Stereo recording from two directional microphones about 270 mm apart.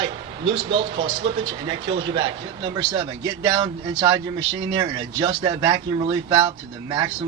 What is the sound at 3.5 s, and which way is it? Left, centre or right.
Speech, centre.